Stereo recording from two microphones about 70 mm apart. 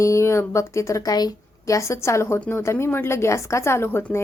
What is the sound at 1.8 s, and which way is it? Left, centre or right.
A woman's voice, left.